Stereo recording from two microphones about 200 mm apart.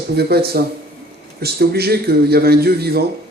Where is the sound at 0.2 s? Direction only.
55° right (ahead or behind).